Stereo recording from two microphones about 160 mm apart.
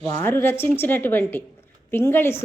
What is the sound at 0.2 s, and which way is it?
A woman's voice, 15° left (ahead or behind).